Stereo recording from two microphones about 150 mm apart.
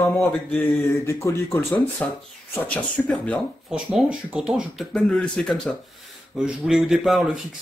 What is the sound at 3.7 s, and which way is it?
Speech, 5° right (ahead or behind).